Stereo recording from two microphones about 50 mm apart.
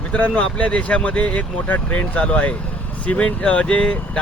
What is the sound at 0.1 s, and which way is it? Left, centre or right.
Speech, left.